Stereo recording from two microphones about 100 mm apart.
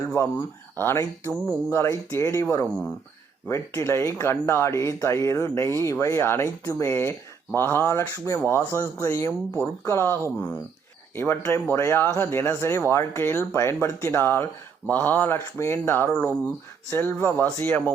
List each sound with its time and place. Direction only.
0.2 s speech: 35° left (ahead or behind)
0.8 s speech: 25° left (ahead or behind)